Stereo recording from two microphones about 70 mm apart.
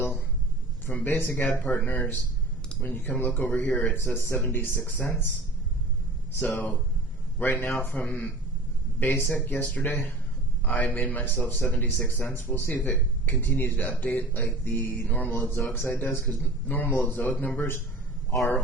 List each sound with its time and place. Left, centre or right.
0.9 s speech: left
6.4 s speech: left